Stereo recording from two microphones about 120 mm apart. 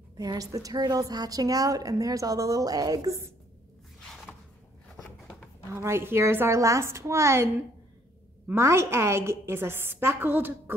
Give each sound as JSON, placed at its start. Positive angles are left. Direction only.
{"t": 0.2, "sound": "a woman's voice", "side_deg": -30}
{"t": 5.8, "sound": "a woman's voice", "side_deg": -20}
{"t": 8.5, "sound": "a woman's voice", "side_deg": -20}